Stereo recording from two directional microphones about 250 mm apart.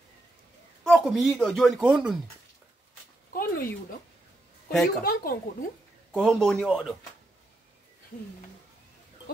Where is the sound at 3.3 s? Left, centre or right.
Left.